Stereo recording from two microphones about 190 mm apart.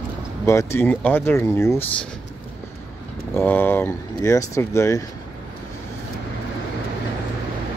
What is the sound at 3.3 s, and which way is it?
Speech, 10° left (ahead or behind).